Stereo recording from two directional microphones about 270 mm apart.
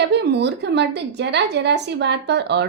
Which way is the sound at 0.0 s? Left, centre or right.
Right.